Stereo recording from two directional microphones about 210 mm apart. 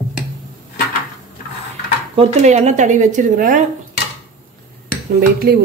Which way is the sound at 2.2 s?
30° right (ahead or behind).